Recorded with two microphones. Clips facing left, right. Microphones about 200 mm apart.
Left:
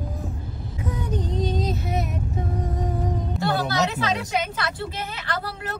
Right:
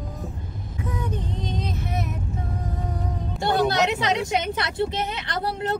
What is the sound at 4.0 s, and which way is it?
Speech, 20° right (ahead or behind).